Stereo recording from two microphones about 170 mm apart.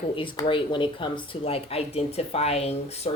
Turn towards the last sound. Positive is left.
turn(degrees=40)  # may be behind; listen again after turning